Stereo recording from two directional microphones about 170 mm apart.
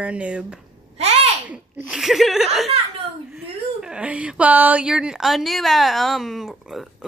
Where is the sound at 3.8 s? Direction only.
5° right (ahead or behind).